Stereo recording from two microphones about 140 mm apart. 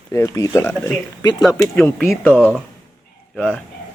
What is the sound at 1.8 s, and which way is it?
A man's voice, 5° left (ahead or behind).